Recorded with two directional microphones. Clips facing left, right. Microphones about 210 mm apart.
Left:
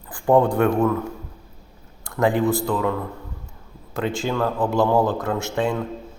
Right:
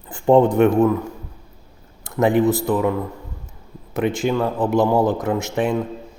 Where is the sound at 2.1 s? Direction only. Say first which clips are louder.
Right 3 dB; 20° right (ahead or behind).